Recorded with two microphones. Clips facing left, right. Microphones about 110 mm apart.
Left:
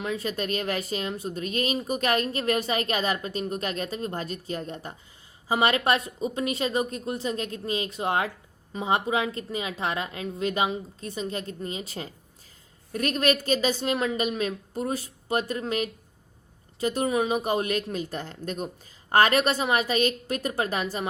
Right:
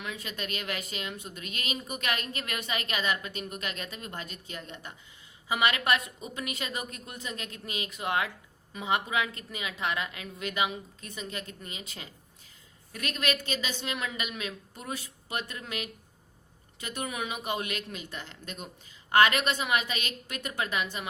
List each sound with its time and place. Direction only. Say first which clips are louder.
0.0 s speech: left 9 dB; 35° left (ahead or behind)